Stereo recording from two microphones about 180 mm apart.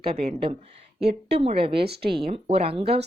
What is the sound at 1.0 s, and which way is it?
Speech, 65° right (ahead or behind).